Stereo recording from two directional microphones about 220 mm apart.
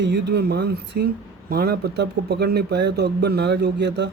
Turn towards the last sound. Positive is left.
turn(degrees=-50)  # may be behind; listen again after turning